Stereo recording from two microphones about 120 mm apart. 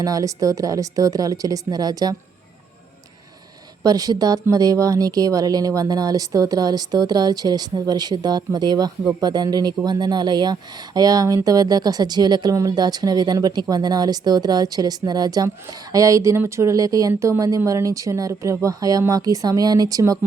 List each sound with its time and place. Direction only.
0.0 s speech: 30° right (ahead or behind)
3.8 s speech: 30° right (ahead or behind)